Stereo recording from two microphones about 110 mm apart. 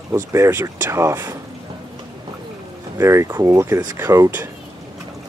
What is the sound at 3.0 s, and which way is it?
Speech, 25° right (ahead or behind).